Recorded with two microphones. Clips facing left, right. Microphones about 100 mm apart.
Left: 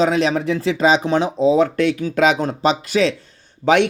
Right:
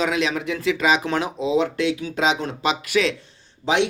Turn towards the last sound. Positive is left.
turn(degrees=55)  # may be behind; listen again after turning